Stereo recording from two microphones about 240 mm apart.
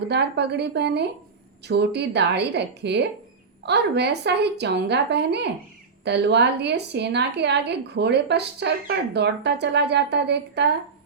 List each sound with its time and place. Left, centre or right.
0.1 s a woman's voice: right